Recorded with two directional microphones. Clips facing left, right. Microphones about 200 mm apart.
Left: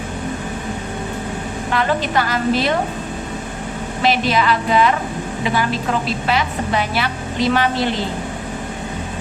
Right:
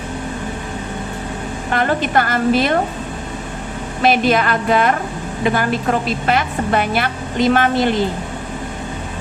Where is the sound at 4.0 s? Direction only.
50° right (ahead or behind).